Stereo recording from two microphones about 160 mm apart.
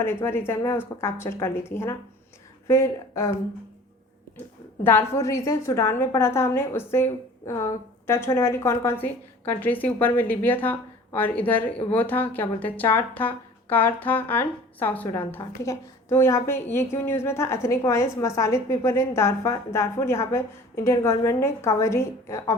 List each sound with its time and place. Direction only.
0.0 s a woman's voice: 15° left (ahead or behind)
4.8 s a woman's voice: 15° left (ahead or behind)